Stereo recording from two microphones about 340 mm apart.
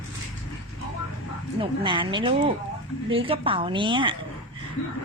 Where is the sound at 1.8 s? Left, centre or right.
Centre.